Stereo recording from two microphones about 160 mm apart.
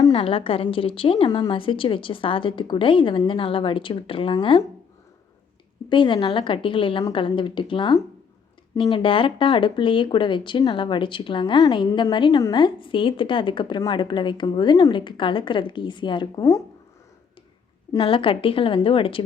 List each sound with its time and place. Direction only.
0.1 s speech: 35° left (ahead or behind)
5.9 s speech: 30° left (ahead or behind)
18.0 s speech: 35° left (ahead or behind)